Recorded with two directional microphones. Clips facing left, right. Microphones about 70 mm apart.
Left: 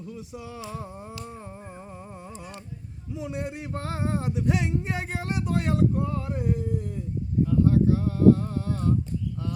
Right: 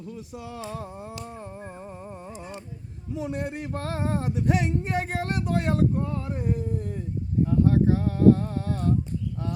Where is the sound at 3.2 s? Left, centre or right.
Right.